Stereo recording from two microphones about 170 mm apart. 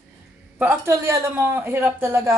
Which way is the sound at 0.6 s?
15° right (ahead or behind).